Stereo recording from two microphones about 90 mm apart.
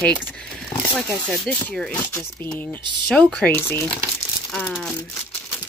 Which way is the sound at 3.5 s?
25° left (ahead or behind).